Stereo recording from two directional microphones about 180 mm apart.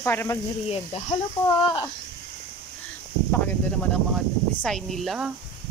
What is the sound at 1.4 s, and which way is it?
Speech, 5° left (ahead or behind).